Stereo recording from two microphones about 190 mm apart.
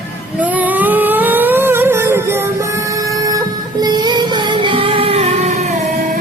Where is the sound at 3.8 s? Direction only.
20° right (ahead or behind); by 5.7 s 35° right (ahead or behind).